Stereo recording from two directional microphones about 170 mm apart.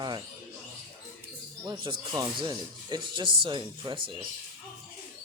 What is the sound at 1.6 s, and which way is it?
Speech, 30° right (ahead or behind).